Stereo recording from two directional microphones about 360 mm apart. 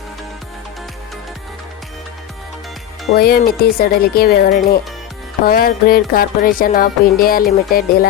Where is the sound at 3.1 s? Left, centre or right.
Left.